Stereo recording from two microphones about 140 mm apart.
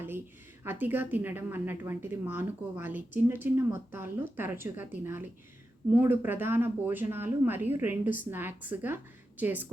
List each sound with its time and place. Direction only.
0.6 s a woman's voice: 15° right (ahead or behind)